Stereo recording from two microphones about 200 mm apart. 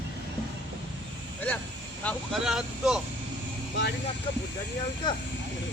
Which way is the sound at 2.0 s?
5° left (ahead or behind).